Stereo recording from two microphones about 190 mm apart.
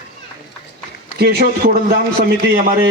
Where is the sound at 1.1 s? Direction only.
55° right (ahead or behind).